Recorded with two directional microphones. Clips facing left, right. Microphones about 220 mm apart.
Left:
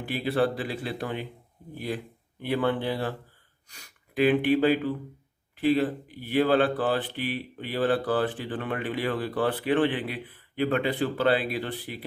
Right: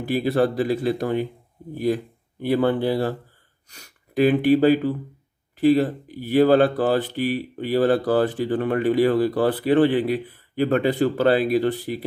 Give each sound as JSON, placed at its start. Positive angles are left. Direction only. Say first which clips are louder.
{"t": 0.0, "sound": "speech", "louder": "right 5 dB", "side_deg": -40}
{"t": 2.4, "sound": "speech", "louder": "right 6 dB", "side_deg": -40}